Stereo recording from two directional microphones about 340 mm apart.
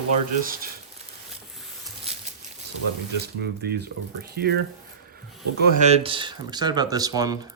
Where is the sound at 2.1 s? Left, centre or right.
Centre.